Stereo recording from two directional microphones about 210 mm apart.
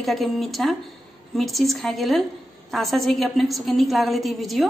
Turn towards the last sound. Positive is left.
turn(degrees=0)  # may be behind; listen again after turning